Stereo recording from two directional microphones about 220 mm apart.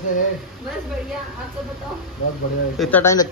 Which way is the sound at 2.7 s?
5° left (ahead or behind).